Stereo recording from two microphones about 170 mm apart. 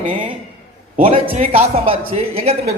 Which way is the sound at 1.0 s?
35° right (ahead or behind).